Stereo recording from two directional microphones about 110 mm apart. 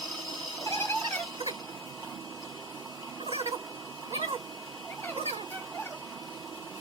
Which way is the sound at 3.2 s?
65° right (ahead or behind).